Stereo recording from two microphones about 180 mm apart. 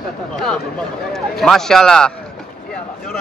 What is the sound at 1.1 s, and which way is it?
Speech, centre (ahead or behind).